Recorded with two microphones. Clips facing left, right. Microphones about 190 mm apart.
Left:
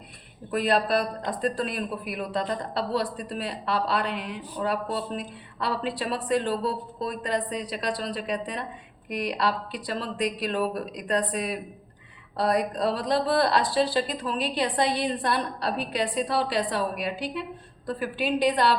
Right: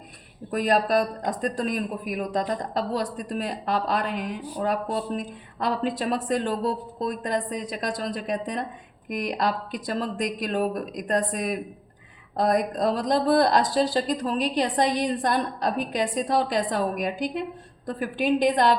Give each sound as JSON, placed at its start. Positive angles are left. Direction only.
{"t": 0.5, "sound": "speech", "side_deg": -45}